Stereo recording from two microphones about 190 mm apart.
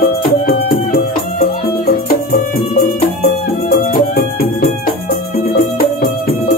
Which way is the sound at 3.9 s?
50° left (ahead or behind).